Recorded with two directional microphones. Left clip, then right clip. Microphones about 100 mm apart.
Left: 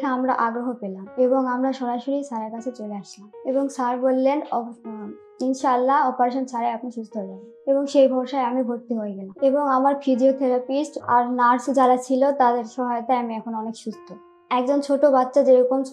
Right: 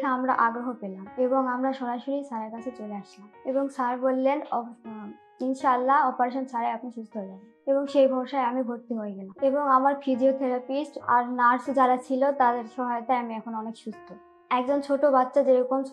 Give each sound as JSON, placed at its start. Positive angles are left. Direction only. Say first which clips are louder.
{"t": 0.0, "sound": "a woman's voice", "louder": "left 2 dB", "side_deg": 30}
{"t": 3.4, "sound": "a woman's voice", "louder": "left 4 dB", "side_deg": 15}
{"t": 3.7, "sound": "a woman's voice", "louder": "left 4 dB", "side_deg": 30}
{"t": 5.6, "sound": "a woman's voice", "louder": "left 3 dB", "side_deg": 30}